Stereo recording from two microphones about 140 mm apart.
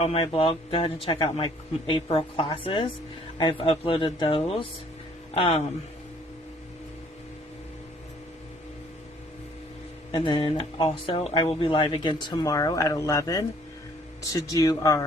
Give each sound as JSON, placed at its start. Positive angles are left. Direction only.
{"t": 0.0, "sound": "speech", "side_deg": 45}
{"t": 10.1, "sound": "speech", "side_deg": 35}